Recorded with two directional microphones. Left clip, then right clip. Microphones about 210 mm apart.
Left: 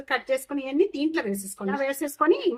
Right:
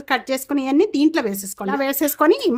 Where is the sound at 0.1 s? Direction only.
50° right (ahead or behind).